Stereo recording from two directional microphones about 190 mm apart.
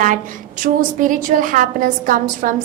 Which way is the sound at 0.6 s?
45° right (ahead or behind).